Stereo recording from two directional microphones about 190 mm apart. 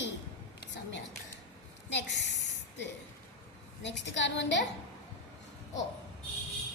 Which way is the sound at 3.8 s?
70° left (ahead or behind).